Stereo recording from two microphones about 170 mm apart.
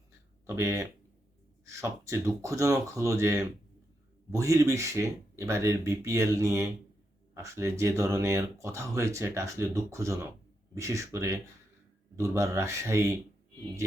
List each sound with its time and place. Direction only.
0.4 s speech: 15° right (ahead or behind)